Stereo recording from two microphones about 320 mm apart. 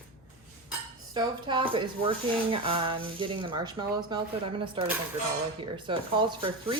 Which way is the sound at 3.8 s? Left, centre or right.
Centre.